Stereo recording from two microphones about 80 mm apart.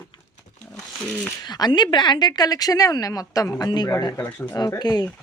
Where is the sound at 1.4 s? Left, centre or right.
Left.